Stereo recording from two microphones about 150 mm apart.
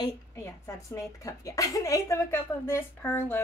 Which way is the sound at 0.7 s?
20° left (ahead or behind).